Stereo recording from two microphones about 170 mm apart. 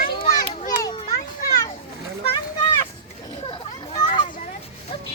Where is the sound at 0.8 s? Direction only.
20° left (ahead or behind).